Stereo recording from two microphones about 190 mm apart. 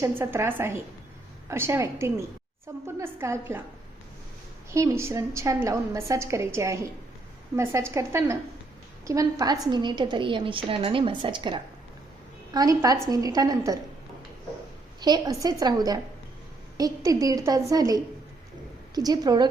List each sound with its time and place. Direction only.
0.0 s a woman's voice: 10° right (ahead or behind)
4.7 s a woman's voice: 15° right (ahead or behind)
15.0 s a woman's voice: 20° right (ahead or behind)